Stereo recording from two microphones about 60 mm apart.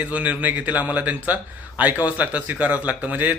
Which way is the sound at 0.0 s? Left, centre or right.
Right.